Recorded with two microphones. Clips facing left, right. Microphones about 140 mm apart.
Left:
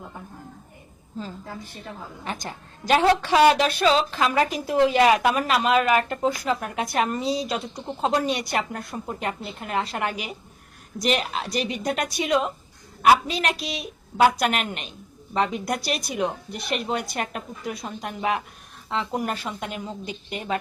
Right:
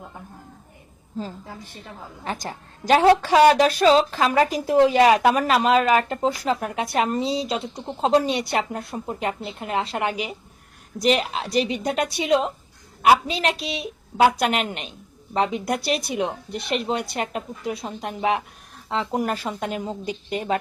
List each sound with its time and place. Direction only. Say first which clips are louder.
2.2 s a woman's voice: right 4 dB; 30° right (ahead or behind)